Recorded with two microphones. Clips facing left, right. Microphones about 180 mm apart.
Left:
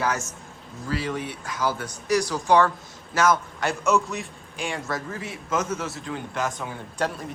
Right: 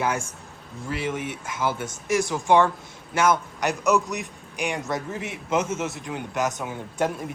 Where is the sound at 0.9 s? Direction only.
20° right (ahead or behind).